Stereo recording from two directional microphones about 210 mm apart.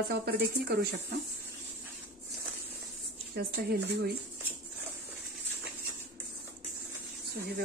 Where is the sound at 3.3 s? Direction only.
50° right (ahead or behind).